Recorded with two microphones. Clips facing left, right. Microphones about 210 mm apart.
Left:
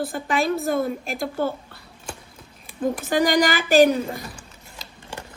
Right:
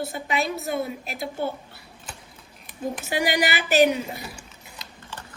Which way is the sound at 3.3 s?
45° left (ahead or behind).